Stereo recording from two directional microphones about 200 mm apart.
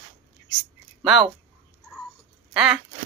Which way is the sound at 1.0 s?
Centre (ahead or behind).